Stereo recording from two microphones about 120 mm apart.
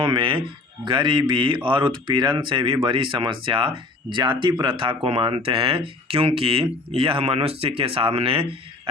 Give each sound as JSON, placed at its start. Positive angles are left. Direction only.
{"t": 0.0, "sound": "speech", "side_deg": -45}